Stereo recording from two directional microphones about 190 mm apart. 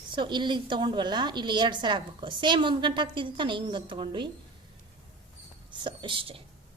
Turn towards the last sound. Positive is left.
turn(degrees=-30)  # may be behind; listen again after turning